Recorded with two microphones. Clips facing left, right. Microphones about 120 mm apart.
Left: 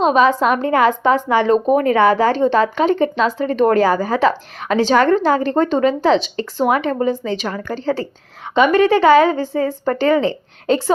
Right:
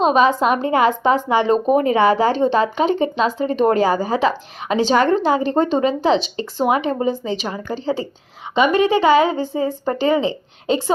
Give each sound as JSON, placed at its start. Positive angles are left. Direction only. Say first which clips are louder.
{"t": 0.0, "sound": "a woman's voice", "louder": "left 1 dB", "side_deg": -25}